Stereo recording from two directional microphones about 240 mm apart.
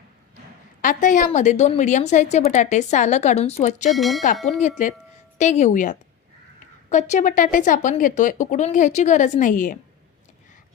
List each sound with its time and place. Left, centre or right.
0.8 s a woman's voice: left
3.8 s speech: centre
5.4 s a woman's voice: left